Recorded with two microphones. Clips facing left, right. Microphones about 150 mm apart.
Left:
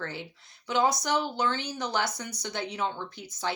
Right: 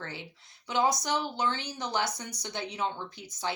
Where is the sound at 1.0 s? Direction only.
60° left (ahead or behind).